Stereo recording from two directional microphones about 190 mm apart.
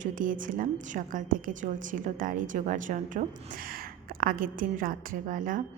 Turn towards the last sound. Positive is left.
turn(degrees=-45)  # may be behind; listen again after turning